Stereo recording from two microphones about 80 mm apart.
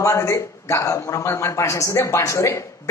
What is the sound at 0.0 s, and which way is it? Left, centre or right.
A man's voice, left.